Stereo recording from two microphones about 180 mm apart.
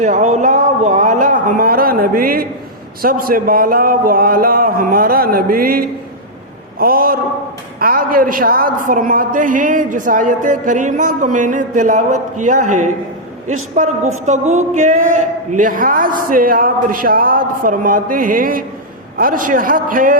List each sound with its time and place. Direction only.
0.0 s a man's voice: 40° right (ahead or behind)